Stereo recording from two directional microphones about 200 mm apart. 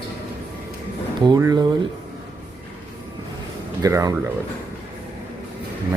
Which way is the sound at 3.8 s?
15° right (ahead or behind).